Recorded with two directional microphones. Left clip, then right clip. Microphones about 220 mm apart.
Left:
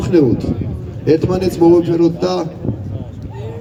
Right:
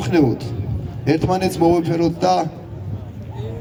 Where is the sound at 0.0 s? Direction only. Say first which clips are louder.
Left 4 dB; 30° right (ahead or behind).